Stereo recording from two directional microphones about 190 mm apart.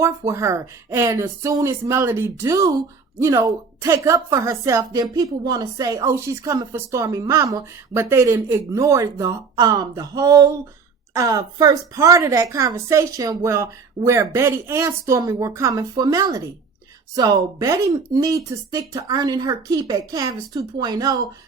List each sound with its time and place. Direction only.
0.0 s speech: 15° right (ahead or behind)